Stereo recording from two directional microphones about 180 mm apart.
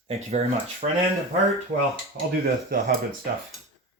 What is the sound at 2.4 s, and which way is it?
Speech, 55° right (ahead or behind).